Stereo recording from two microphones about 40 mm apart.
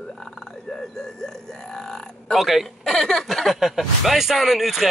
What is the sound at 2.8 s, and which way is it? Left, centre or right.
Speech, centre.